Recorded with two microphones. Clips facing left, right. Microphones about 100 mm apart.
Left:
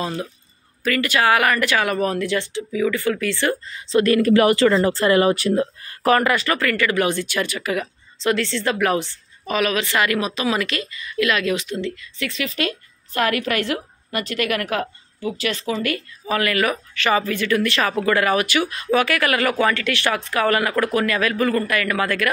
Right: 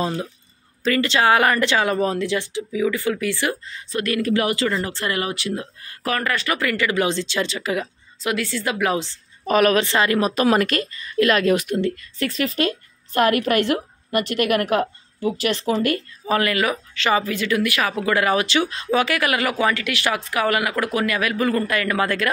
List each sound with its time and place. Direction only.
0.0 s speech: 20° right (ahead or behind)
3.8 s speech: 30° left (ahead or behind)
4.2 s speech: 60° left (ahead or behind)
4.8 s speech: 35° left (ahead or behind)
5.3 s speech: 45° left (ahead or behind)
6.5 s speech: 15° right (ahead or behind)
8.2 s speech: 10° right (ahead or behind)
9.5 s a woman's voice: 40° right (ahead or behind)
10.2 s a woman's voice: 45° right (ahead or behind)
16.3 s speech: 20° right (ahead or behind)